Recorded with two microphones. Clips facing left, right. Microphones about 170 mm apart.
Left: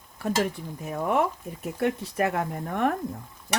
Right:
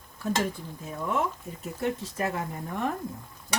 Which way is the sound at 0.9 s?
65° left (ahead or behind).